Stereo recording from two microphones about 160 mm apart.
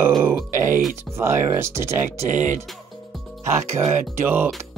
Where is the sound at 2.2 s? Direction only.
50° right (ahead or behind).